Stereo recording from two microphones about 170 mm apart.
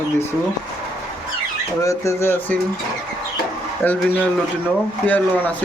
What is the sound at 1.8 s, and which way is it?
Speech, 15° left (ahead or behind).